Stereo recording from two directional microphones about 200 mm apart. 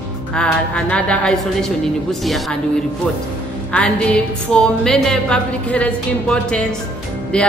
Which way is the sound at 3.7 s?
5° left (ahead or behind).